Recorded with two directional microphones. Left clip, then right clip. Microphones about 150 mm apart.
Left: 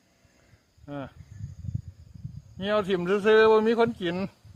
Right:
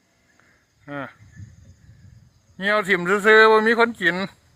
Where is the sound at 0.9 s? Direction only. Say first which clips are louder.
Right 6 dB; 30° right (ahead or behind).